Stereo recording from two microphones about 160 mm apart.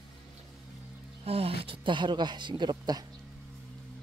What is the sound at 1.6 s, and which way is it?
Speech, 30° right (ahead or behind).